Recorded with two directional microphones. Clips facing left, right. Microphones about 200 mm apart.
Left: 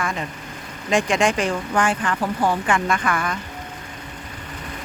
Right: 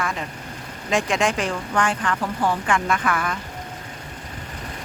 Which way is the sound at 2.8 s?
Centre (ahead or behind).